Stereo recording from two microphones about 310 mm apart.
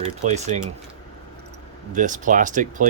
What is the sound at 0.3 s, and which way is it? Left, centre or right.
Speech, right.